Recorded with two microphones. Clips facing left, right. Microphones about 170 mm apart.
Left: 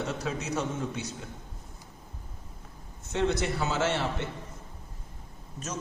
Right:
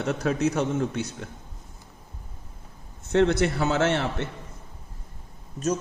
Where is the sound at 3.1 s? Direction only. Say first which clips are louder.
Right 7 dB; 65° right (ahead or behind).